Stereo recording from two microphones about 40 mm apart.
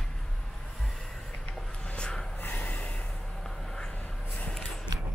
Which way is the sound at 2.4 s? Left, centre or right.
Left.